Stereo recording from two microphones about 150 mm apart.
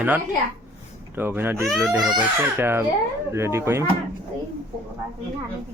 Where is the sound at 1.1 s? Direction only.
15° right (ahead or behind).